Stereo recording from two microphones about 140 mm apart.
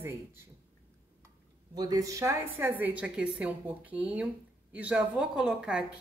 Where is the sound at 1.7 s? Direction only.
25° right (ahead or behind).